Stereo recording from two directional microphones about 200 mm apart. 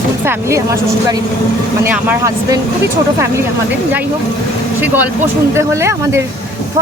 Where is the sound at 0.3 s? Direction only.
15° right (ahead or behind).